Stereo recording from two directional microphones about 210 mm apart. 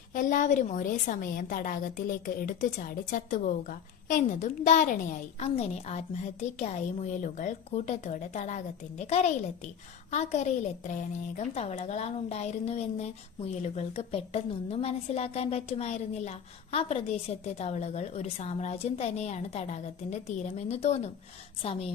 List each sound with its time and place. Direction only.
0.1 s a woman's voice: 40° left (ahead or behind)